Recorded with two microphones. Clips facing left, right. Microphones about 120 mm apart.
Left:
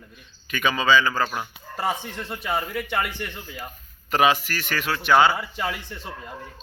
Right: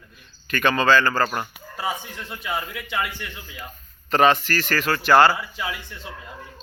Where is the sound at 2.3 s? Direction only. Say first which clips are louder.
Left 2 dB; 45° left (ahead or behind).